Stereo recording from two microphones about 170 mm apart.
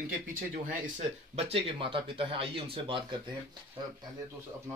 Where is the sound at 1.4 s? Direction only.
35° right (ahead or behind).